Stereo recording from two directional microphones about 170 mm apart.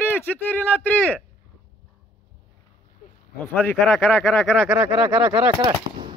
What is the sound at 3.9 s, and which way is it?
Speech, centre (ahead or behind).